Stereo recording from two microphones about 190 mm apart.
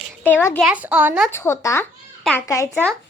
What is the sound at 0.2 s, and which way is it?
Speech, 10° left (ahead or behind).